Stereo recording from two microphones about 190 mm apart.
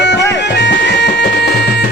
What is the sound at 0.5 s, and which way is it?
Bagpipes, 65° left (ahead or behind).